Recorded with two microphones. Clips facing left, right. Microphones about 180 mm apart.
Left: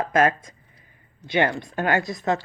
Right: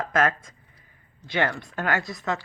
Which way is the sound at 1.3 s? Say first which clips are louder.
Left 4 dB; 20° left (ahead or behind).